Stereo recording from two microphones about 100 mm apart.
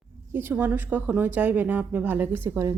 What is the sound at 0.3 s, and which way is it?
Speech, 20° right (ahead or behind).